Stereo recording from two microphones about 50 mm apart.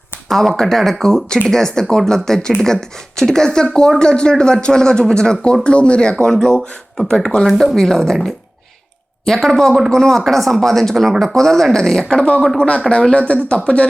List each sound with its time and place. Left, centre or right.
0.3 s speech: centre
7.4 s speech: centre; by 13.6 s left